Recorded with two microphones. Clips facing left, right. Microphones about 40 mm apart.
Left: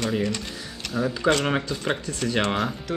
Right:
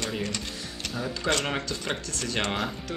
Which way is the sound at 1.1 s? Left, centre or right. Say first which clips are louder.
Left 5 dB; left.